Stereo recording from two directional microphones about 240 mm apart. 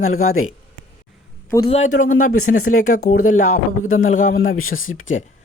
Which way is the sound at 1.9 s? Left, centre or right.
Left.